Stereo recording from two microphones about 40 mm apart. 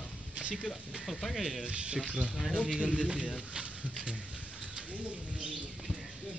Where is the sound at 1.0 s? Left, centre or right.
Centre.